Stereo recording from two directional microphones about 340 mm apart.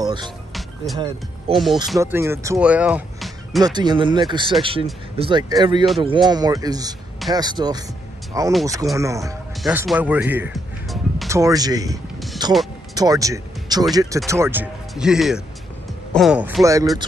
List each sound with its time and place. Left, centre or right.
0.0 s music: centre
0.9 s speech: centre
3.6 s speech: centre